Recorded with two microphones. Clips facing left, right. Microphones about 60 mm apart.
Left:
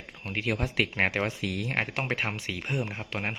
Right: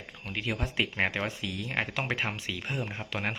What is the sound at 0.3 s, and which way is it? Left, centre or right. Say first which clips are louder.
Speech: left 3 dB; left.